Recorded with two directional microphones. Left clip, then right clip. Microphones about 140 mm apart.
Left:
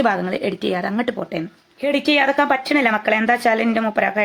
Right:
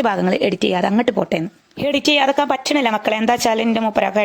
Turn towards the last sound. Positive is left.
turn(degrees=-60)  # may be behind; listen again after turning